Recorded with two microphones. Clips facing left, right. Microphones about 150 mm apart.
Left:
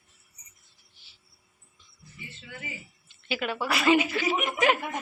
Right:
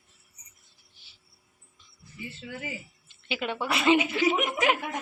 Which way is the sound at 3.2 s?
20° right (ahead or behind).